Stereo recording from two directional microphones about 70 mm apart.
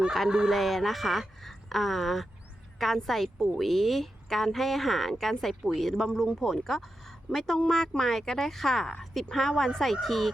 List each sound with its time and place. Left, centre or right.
0.0 s a woman's voice: centre